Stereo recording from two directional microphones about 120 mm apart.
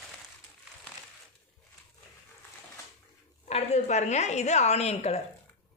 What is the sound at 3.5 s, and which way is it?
Speech, 65° left (ahead or behind).